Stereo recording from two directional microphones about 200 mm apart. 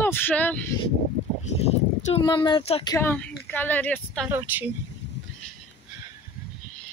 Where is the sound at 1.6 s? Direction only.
30° left (ahead or behind).